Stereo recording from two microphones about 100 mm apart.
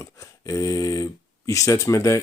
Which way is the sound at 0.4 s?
35° left (ahead or behind).